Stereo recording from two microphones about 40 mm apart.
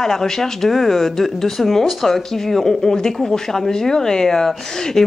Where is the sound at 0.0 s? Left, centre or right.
Centre.